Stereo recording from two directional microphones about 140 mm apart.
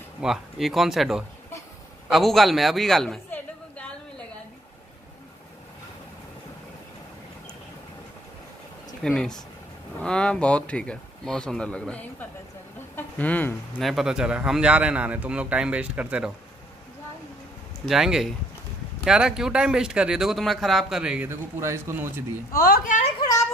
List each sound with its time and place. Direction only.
0.2 s speech: centre (ahead or behind)
3.3 s chatter: 10° left (ahead or behind)
9.0 s speech: 5° left (ahead or behind)
13.7 s a man's voice: centre (ahead or behind)
17.8 s speech: 5° right (ahead or behind)
21.3 s speech: 20° right (ahead or behind)
22.5 s a woman's voice: 90° left; by 23.1 s 65° left (ahead or behind)